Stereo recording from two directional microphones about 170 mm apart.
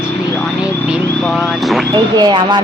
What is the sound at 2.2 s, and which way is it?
Speech, 25° right (ahead or behind).